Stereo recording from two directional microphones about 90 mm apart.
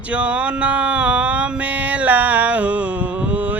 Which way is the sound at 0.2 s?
15° right (ahead or behind).